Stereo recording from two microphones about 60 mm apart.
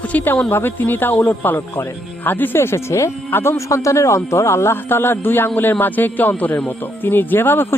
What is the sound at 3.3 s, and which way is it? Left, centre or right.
Speech, left.